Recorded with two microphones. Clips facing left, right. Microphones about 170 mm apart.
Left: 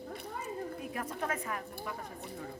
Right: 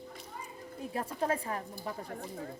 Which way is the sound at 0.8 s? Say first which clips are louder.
Right 9 dB; 30° right (ahead or behind).